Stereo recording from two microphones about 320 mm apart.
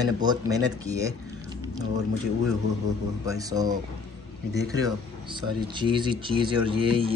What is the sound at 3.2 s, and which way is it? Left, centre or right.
Speech, centre.